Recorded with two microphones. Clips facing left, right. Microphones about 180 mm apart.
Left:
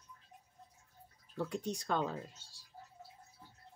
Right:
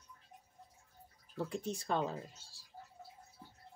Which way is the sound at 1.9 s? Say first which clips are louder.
Right 1 dB; 35° right (ahead or behind).